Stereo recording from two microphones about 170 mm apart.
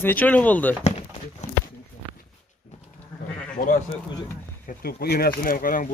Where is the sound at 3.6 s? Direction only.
60° left (ahead or behind).